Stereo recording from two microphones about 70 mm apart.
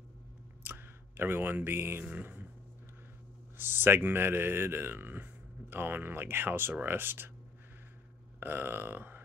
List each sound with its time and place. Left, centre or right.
0.7 s speech: right
2.0 s burping: right
3.5 s speech: right
8.4 s burping: right